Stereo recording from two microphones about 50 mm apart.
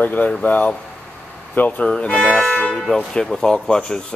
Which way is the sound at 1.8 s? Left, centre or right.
Left.